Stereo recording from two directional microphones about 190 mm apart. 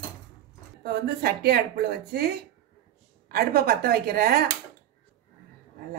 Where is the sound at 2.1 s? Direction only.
55° right (ahead or behind).